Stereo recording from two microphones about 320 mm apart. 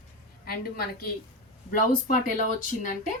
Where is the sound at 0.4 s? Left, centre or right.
Left.